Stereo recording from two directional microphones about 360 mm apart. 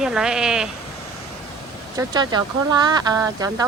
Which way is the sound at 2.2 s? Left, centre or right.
Centre.